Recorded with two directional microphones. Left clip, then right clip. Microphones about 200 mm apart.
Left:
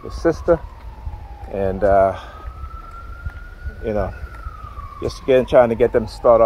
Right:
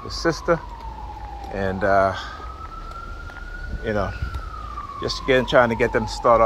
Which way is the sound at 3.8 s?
45° left (ahead or behind).